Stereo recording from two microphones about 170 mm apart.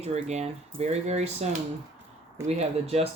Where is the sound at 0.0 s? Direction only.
40° right (ahead or behind).